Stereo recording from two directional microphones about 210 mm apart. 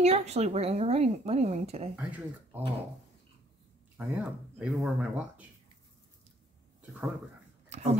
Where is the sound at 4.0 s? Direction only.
5° right (ahead or behind).